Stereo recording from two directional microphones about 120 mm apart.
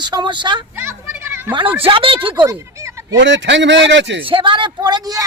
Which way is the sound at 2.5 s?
25° right (ahead or behind).